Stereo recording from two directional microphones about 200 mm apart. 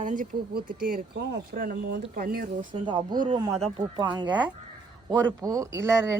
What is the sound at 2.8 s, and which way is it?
Speech, 20° right (ahead or behind).